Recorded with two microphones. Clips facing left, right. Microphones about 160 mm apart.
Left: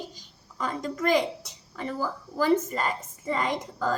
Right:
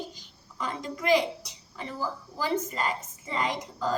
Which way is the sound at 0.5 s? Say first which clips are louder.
Left 4 dB; 45° left (ahead or behind).